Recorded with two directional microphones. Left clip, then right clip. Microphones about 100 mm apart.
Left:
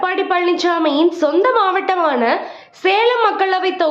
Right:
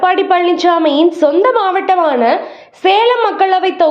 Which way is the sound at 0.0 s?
35° right (ahead or behind).